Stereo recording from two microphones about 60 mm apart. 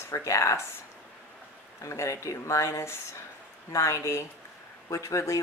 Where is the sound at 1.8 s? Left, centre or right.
Left.